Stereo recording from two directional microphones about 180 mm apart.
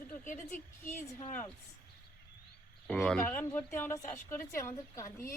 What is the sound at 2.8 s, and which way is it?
A woman's voice, 5° left (ahead or behind).